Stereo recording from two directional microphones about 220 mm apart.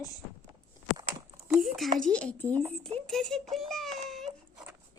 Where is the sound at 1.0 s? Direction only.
15° right (ahead or behind).